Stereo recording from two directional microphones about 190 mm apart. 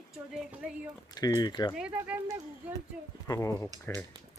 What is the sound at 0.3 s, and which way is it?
Speech, 5° right (ahead or behind).